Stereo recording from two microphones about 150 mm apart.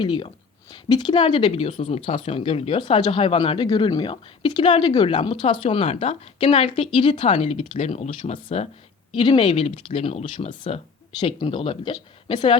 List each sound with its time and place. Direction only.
0.0 s speech: 30° left (ahead or behind)
3.7 s speech: 30° left (ahead or behind); by 8.6 s 50° left (ahead or behind)
9.1 s speech: 35° left (ahead or behind)